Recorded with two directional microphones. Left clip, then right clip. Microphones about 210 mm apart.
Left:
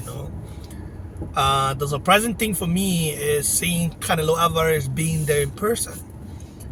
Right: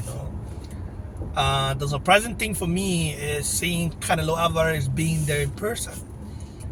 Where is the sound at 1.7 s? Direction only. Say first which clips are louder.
Left 1 dB; 20° left (ahead or behind).